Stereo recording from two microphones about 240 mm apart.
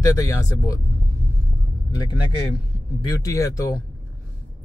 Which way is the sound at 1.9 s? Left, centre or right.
Centre.